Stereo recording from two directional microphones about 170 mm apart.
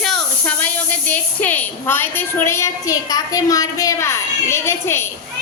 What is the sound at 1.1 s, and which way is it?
A woman's voice, 10° left (ahead or behind).